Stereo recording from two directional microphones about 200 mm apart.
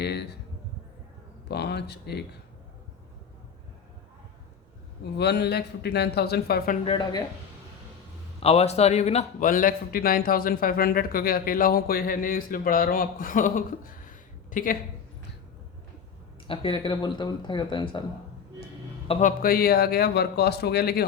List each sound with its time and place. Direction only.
0.0 s a sound: 55° left (ahead or behind)
1.5 s speech: 55° left (ahead or behind)
5.1 s speech: 55° left (ahead or behind)
6.8 s speech: 25° left (ahead or behind)
8.4 s a man's voice: 30° left (ahead or behind)
16.5 s speech: 25° left (ahead or behind)
19.0 s a man's voice: 30° left (ahead or behind)
19.4 s a man's voice: 50° left (ahead or behind)